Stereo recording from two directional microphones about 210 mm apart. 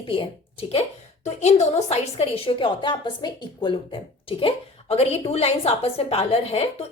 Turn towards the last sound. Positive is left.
turn(degrees=30)  # may be behind; listen again after turning